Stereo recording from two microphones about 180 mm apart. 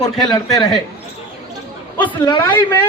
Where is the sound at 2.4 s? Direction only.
15° left (ahead or behind).